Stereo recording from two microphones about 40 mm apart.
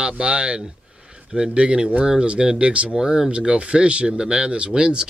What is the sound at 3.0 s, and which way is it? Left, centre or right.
Speech, centre.